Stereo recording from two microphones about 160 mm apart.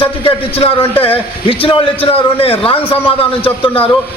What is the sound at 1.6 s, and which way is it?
A man's voice, 35° left (ahead or behind).